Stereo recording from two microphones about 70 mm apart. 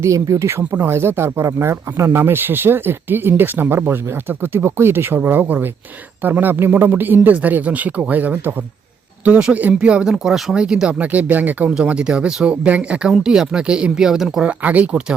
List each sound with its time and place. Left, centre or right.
0.0 s speech: right; by 11.0 s centre
11.0 s speech: right
11.7 s speech: centre
13.1 s speech: centre
14.4 s speech: right